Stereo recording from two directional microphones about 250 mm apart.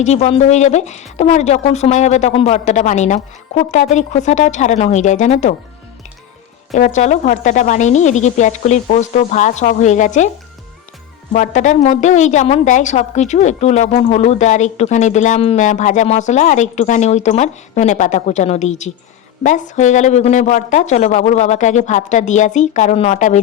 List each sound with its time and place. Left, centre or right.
0.0 s a woman's voice: left
6.7 s a woman's voice: left
11.3 s a woman's voice: left